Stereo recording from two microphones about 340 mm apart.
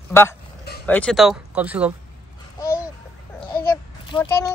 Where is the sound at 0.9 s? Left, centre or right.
Centre.